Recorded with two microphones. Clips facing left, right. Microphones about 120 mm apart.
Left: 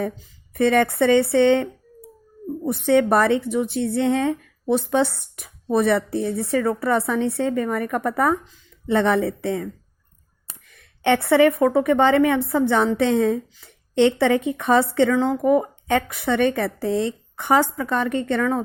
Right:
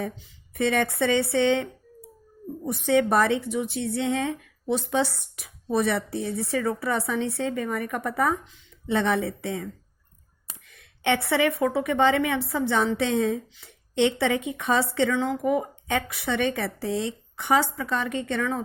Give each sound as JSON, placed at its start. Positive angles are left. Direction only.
{"t": 0.5, "sound": "speech", "side_deg": 55}
{"t": 10.8, "sound": "a woman's voice", "side_deg": 55}
{"t": 15.1, "sound": "a woman's voice", "side_deg": 40}